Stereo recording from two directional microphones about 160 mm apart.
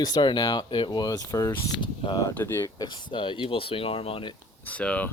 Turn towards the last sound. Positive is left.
turn(degrees=10)  # may be behind; listen again after turning